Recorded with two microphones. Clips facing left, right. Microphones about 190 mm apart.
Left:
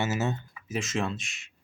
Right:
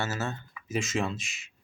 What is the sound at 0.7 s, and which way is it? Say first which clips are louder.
Speech: even; centre (ahead or behind).